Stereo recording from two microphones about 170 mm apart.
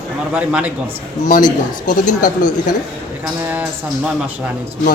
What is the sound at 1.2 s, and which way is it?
Speech, 50° left (ahead or behind).